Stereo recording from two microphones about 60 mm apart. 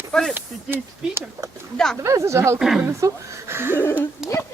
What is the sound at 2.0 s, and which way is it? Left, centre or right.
Speech, right.